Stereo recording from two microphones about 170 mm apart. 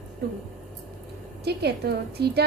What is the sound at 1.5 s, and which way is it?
Speech, 70° right (ahead or behind).